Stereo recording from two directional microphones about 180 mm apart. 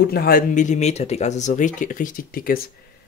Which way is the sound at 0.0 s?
60° left (ahead or behind).